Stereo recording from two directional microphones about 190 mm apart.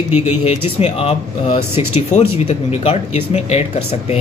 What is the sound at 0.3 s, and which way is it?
Speech, 35° left (ahead or behind).